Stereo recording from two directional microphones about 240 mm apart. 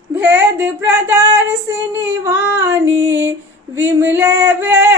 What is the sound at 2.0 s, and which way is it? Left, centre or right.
Female singing, centre.